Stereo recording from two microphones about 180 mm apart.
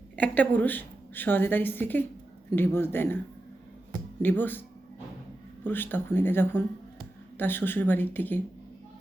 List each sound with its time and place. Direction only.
0.2 s a woman's voice: 10° left (ahead or behind)
4.2 s a woman's voice: 10° left (ahead or behind)
5.6 s a woman's voice: 10° left (ahead or behind)